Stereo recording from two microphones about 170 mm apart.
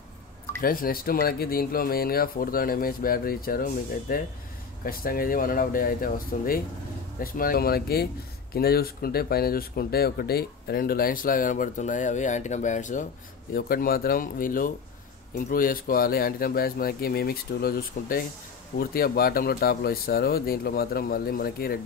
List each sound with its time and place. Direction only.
0.6 s speech: 55° left (ahead or behind)
13.5 s speech: 60° left (ahead or behind)